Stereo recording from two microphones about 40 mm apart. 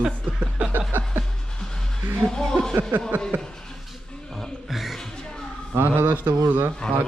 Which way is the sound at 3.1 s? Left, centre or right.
Right.